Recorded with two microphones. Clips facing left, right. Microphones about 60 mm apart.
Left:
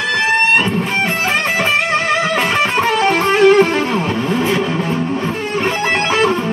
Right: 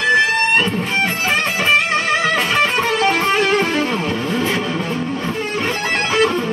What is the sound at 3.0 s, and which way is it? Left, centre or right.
Music, left.